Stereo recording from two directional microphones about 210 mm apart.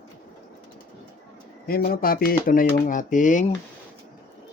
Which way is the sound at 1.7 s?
45° left (ahead or behind).